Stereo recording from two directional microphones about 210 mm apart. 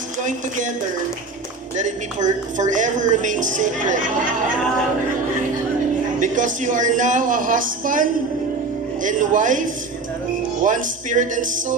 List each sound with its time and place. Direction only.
0.2 s a woman's voice: 35° right (ahead or behind)
1.7 s a woman's voice: 35° right (ahead or behind)
6.1 s a woman's voice: 35° right (ahead or behind)